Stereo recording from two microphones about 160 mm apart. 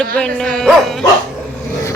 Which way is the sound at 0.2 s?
5° left (ahead or behind).